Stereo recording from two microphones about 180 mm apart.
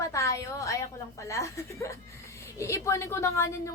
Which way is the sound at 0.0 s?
15° left (ahead or behind).